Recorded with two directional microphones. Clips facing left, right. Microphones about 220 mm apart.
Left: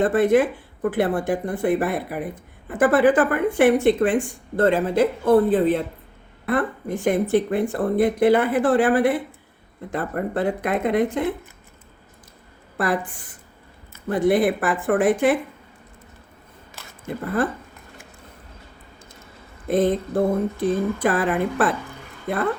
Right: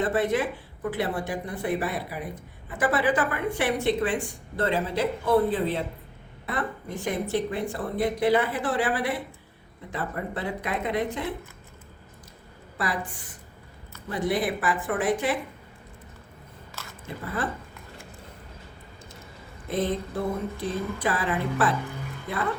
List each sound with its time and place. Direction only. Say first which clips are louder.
0.0 s speech: left 7 dB; 50° left (ahead or behind)
12.7 s a woman's voice: left 7 dB; 50° left (ahead or behind)
14.1 s speech: left 8 dB; 55° left (ahead or behind)
16.8 s a sound: right 1 dB; 15° left (ahead or behind)
19.7 s speech: left 8 dB; 50° left (ahead or behind)